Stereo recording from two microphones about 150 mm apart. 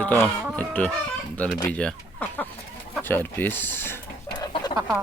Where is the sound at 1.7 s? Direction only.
10° left (ahead or behind).